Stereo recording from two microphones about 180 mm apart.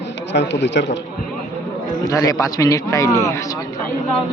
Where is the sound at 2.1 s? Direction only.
20° left (ahead or behind).